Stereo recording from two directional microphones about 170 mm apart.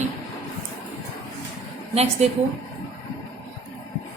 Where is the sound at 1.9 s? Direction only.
40° right (ahead or behind).